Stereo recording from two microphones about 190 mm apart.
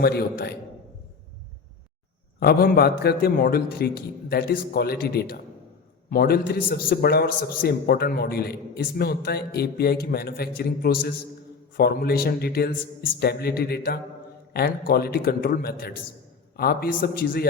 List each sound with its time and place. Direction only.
0.0 s a man's voice: 55° left (ahead or behind)
2.4 s a man's voice: 55° left (ahead or behind)